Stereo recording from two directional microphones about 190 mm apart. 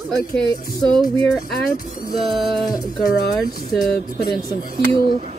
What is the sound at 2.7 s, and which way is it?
Speech, 20° left (ahead or behind).